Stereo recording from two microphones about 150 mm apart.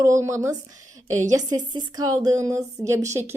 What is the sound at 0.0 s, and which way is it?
A woman's voice, 20° right (ahead or behind).